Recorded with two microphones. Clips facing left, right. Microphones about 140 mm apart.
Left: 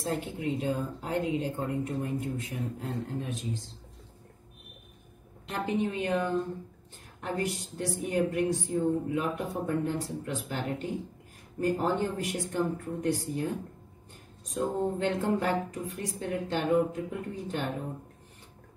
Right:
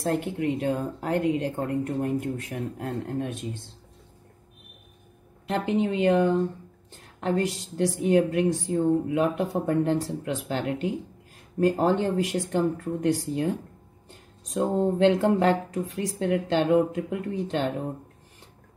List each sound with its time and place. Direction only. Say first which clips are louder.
0.0 s speech: right 6 dB; 65° right (ahead or behind)
5.5 s a woman's voice: right 5 dB; 90° right
14.5 s a woman's voice: right 5 dB; 85° right